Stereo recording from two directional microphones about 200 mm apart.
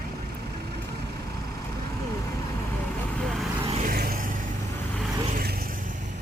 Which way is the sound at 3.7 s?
45° right (ahead or behind).